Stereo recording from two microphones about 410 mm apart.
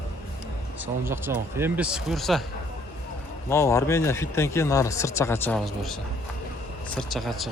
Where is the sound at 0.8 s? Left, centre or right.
Centre.